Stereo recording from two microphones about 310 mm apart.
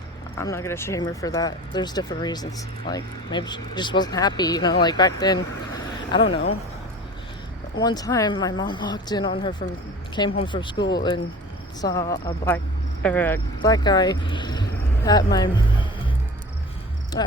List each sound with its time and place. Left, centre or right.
0.3 s speech: centre
7.8 s speech: centre